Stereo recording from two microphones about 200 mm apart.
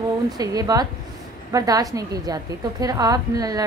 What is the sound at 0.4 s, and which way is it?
A woman's voice, 20° right (ahead or behind).